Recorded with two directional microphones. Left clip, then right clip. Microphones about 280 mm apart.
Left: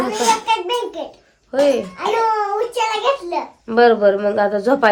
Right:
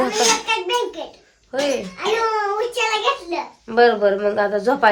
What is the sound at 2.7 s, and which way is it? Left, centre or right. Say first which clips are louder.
Speech: left 3 dB; left.